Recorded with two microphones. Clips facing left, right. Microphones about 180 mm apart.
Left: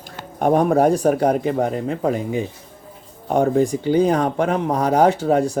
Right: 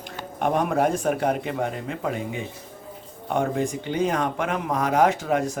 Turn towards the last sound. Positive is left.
turn(degrees=35)  # may be behind; listen again after turning